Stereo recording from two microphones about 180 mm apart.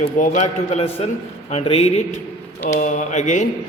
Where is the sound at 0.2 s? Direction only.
40° left (ahead or behind).